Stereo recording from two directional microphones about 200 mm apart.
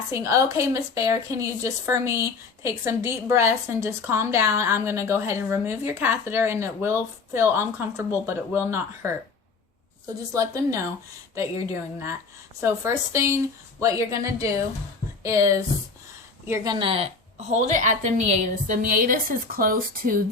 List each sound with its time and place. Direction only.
0.1 s a woman's voice: 15° right (ahead or behind)
10.3 s a woman's voice: 15° right (ahead or behind); by 20.2 s 45° right (ahead or behind)